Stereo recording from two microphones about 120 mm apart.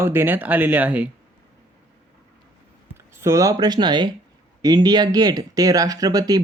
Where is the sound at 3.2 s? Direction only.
25° right (ahead or behind).